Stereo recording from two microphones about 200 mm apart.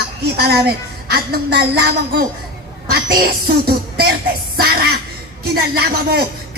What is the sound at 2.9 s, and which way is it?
A woman's voice, 50° right (ahead or behind).